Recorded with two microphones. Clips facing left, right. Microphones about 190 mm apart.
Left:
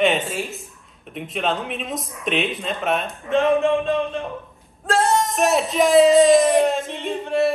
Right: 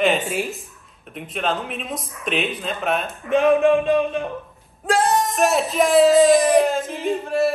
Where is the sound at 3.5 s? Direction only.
15° right (ahead or behind).